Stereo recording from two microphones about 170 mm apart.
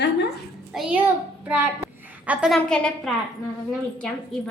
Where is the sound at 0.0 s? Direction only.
85° left.